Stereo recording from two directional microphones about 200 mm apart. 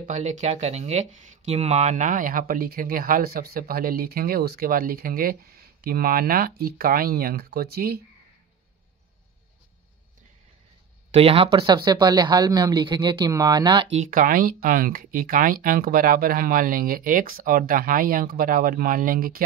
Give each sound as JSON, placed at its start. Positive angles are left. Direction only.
{"t": 0.0, "sound": "speech", "side_deg": -40}
{"t": 11.1, "sound": "speech", "side_deg": -30}
{"t": 13.9, "sound": "speech", "side_deg": -40}